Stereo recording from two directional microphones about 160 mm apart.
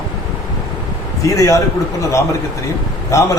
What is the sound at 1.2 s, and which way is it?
Speech, 20° left (ahead or behind).